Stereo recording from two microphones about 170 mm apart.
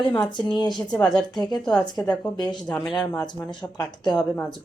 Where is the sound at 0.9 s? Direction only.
5° left (ahead or behind).